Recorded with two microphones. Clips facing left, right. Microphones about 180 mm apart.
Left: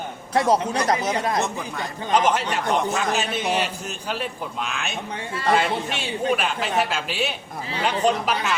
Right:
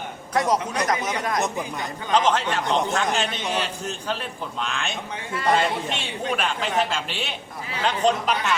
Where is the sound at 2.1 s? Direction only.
10° left (ahead or behind).